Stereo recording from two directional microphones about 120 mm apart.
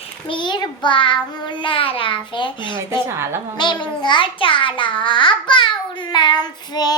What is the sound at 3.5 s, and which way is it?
A child's voice, 40° left (ahead or behind).